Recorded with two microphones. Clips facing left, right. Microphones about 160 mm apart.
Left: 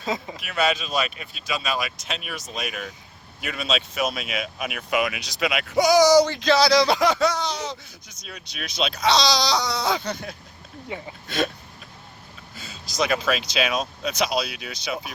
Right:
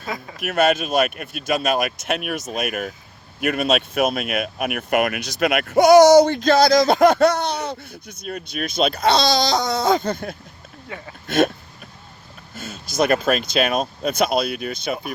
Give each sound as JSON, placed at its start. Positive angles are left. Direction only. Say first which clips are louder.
{"t": 0.0, "sound": "speech", "louder": "left 2 dB", "side_deg": 20}
{"t": 0.3, "sound": "speech", "louder": "right 8 dB", "side_deg": -50}
{"t": 10.8, "sound": "speech", "louder": "left 2 dB", "side_deg": 15}
{"t": 11.3, "sound": "a sound", "louder": "right 8 dB", "side_deg": -55}
{"t": 12.5, "sound": "speech", "louder": "right 5 dB", "side_deg": -50}